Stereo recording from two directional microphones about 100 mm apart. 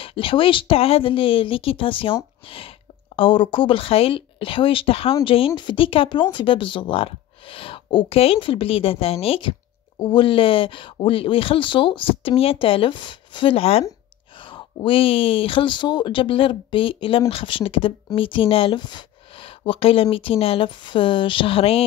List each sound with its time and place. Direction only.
0.0 s speech: 65° left (ahead or behind)
14.4 s speech: 55° left (ahead or behind); by 21.8 s 70° left (ahead or behind)